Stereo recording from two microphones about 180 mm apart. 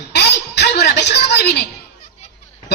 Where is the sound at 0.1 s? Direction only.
70° left (ahead or behind).